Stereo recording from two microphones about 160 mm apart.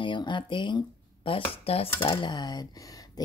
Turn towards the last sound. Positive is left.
turn(degrees=20)  # may be behind; listen again after turning